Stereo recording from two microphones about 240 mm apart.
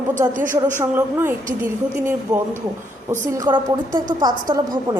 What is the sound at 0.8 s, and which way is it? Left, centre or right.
A woman's voice, centre.